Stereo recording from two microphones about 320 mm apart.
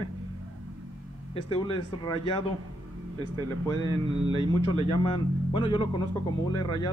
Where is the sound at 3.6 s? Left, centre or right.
Centre.